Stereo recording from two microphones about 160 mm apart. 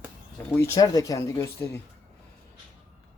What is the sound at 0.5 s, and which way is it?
Speech, 15° left (ahead or behind).